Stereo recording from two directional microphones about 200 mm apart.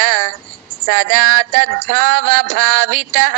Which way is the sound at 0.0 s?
45° right (ahead or behind).